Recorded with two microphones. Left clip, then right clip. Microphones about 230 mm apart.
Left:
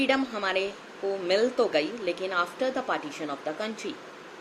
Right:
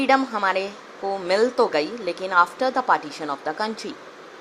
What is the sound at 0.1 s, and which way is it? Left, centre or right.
Speech, centre.